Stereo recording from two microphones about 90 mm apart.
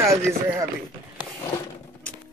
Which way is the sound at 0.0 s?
35° right (ahead or behind).